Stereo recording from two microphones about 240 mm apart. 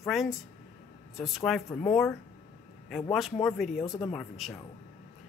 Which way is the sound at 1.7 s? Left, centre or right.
Centre.